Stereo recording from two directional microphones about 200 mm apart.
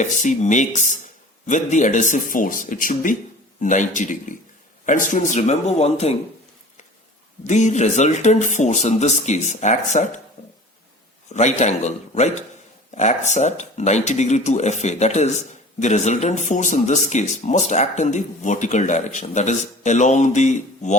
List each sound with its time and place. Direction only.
0.0 s speech: 35° left (ahead or behind)
7.4 s speech: 35° left (ahead or behind)
11.3 s speech: 35° left (ahead or behind)